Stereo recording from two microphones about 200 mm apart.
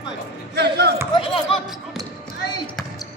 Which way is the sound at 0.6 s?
55° right (ahead or behind).